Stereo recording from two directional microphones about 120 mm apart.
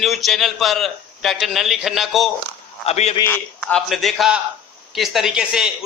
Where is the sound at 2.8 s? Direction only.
65° left (ahead or behind).